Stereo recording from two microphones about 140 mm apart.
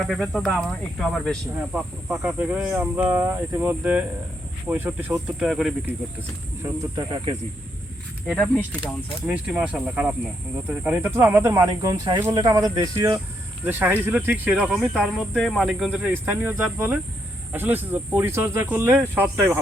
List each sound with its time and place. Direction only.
0.0 s cricket: centre (ahead or behind)
2.2 s speech: 10° right (ahead or behind)
5.4 s cricket: centre (ahead or behind)
6.9 s speech: 35° right (ahead or behind)
8.3 s speech: 10° left (ahead or behind)
8.8 s speech: 10° right (ahead or behind); by 13.1 s 25° right (ahead or behind)
13.7 s speech: 15° right (ahead or behind)